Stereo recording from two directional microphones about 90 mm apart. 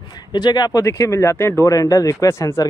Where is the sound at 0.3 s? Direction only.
55° left (ahead or behind).